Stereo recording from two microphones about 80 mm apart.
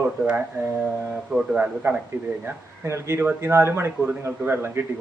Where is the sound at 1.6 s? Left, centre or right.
Centre.